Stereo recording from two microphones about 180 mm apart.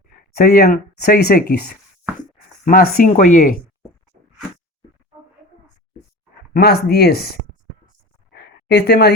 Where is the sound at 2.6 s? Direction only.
55° left (ahead or behind).